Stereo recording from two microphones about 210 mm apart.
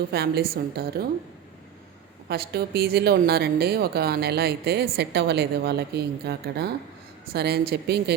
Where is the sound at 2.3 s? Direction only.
50° right (ahead or behind).